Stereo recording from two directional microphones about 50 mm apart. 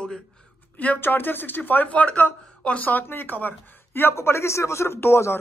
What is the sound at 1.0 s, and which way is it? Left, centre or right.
Speech, left.